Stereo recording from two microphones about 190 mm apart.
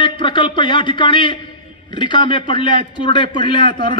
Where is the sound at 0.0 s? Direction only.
25° left (ahead or behind).